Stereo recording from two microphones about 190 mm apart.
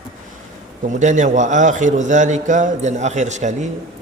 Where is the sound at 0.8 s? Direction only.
40° right (ahead or behind).